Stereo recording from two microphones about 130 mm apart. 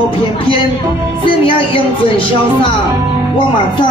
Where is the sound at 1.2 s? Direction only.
45° left (ahead or behind).